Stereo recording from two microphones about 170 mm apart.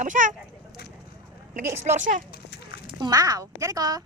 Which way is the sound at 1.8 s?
45° right (ahead or behind).